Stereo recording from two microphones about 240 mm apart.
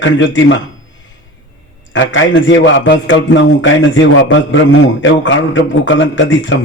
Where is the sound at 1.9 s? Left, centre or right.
Left.